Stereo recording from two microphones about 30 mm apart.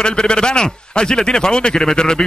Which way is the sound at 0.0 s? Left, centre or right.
Left.